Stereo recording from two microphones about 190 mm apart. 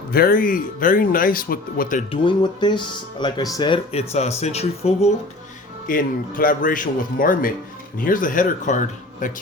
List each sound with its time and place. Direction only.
0.1 s speech: 50° left (ahead or behind)
2.0 s speech: 25° left (ahead or behind)
5.9 s speech: 50° left (ahead or behind)